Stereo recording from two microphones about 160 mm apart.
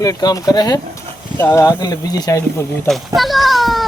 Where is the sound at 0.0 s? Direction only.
20° left (ahead or behind).